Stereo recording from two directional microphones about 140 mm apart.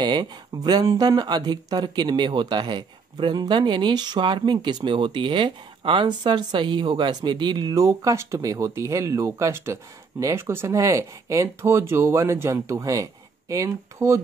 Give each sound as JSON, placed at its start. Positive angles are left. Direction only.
{"t": 0.0, "sound": "speech", "side_deg": -30}